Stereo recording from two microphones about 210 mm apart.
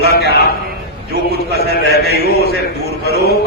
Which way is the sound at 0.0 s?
50° left (ahead or behind).